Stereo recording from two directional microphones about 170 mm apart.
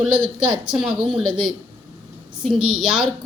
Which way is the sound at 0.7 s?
5° right (ahead or behind).